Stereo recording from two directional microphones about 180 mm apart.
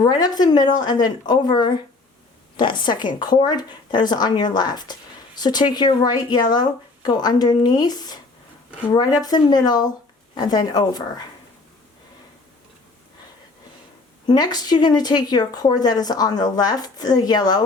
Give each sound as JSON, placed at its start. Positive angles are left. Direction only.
{"t": 0.0, "sound": "speech", "side_deg": 20}
{"t": 14.3, "sound": "speech", "side_deg": 20}